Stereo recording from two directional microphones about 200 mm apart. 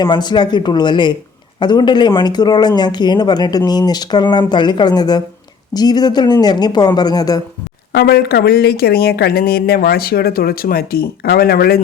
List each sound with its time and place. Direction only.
0.0 s speech: 20° left (ahead or behind)
7.9 s speech: 55° left (ahead or behind)